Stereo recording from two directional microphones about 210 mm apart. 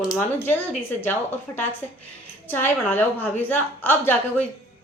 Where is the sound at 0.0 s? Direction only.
20° left (ahead or behind).